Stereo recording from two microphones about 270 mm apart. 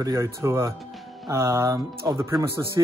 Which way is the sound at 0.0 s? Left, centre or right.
Centre.